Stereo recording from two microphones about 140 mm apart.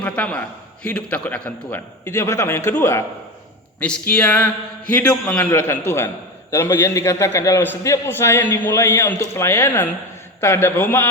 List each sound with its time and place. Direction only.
0.0 s a man's voice: 10° left (ahead or behind)
3.8 s a man's voice: 5° left (ahead or behind)